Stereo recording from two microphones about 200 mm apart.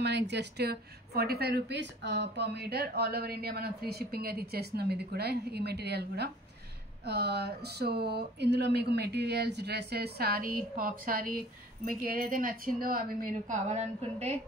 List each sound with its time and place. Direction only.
0.0 s speech: 55° right (ahead or behind); by 14.4 s 35° right (ahead or behind)